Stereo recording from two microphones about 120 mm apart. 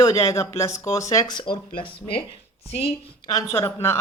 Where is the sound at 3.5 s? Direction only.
20° left (ahead or behind).